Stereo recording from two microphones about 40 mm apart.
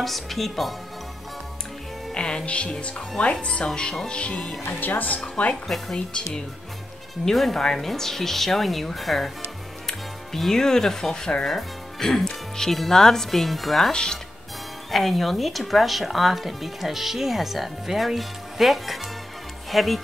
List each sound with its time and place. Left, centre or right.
0.0 s speech: centre
2.1 s speech: left
4.6 s speech: left
5.4 s speech: left
7.2 s speech: centre
11.4 s speech: centre
13.9 s speech: centre
14.9 s speech: centre